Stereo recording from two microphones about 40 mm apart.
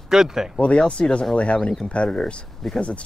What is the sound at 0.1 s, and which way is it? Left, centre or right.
Speech, centre.